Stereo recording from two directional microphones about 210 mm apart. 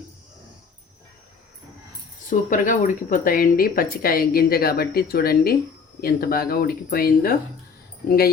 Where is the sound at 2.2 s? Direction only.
40° left (ahead or behind).